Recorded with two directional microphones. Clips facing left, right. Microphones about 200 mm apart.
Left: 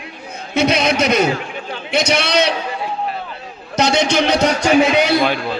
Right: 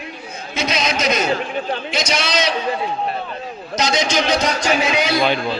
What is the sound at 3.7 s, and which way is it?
A man's voice, 65° left (ahead or behind).